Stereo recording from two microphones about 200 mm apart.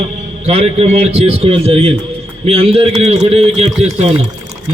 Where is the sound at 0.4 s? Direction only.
30° right (ahead or behind).